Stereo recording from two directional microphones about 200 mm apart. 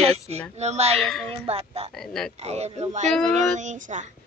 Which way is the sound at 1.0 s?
Centre (ahead or behind).